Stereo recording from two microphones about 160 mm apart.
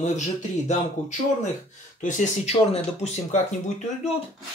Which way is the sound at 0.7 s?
45° left (ahead or behind).